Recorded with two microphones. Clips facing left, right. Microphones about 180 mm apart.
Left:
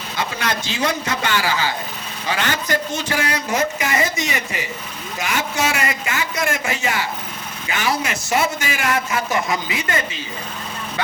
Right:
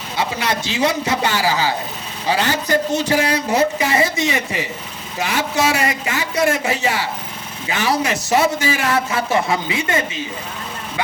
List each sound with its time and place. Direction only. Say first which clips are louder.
1.2 s a man's voice: right 1 dB; 35° right (ahead or behind)